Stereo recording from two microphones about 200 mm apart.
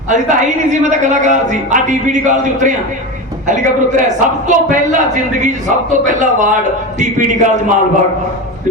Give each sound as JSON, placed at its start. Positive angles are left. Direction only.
{"t": 0.1, "sound": "a man's voice", "side_deg": -40}